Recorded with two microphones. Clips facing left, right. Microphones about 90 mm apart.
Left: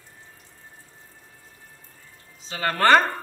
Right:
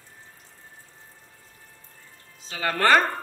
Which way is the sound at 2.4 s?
5° right (ahead or behind).